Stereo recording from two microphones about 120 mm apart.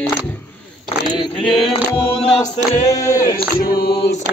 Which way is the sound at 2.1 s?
60° left (ahead or behind).